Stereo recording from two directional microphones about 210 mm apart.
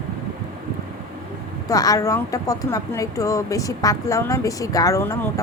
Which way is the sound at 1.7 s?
15° left (ahead or behind).